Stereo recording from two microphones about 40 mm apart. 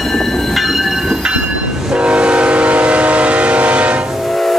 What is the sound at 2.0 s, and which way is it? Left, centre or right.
Train, right.